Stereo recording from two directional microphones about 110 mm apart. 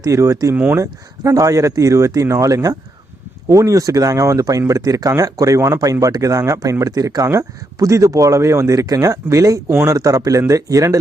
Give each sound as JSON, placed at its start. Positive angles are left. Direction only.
{"t": 0.0, "sound": "speech", "side_deg": -30}
{"t": 0.5, "sound": "speech", "side_deg": -15}
{"t": 0.8, "sound": "speech", "side_deg": -30}